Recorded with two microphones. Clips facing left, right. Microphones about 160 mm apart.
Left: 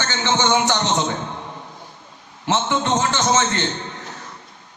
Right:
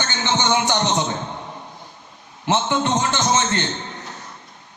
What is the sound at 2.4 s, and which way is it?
A man's voice, 20° right (ahead or behind).